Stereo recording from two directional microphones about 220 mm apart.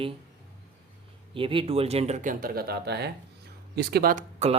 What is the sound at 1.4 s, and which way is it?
Speech, 25° right (ahead or behind).